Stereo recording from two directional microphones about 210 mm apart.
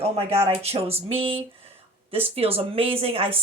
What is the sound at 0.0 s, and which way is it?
Speech, 30° right (ahead or behind).